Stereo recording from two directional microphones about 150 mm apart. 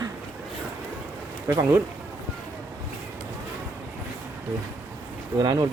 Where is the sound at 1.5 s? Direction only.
20° right (ahead or behind).